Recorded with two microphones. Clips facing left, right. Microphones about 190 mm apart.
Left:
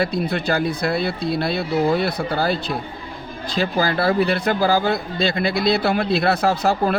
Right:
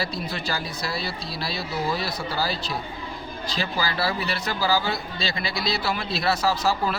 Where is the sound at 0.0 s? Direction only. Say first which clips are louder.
Left 8 dB; 55° left (ahead or behind).